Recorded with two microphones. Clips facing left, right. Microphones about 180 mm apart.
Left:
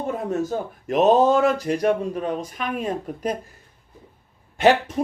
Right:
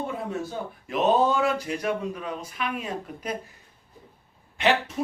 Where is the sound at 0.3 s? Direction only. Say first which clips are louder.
Left 7 dB; 45° left (ahead or behind).